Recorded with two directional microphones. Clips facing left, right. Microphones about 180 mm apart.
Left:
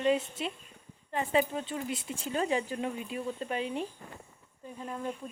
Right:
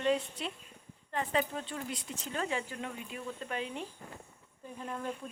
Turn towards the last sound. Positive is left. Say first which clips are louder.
# left 2 dB
turn(degrees=5)  # may be behind; listen again after turning